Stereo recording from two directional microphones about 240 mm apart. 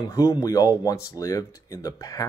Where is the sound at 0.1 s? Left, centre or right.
Centre.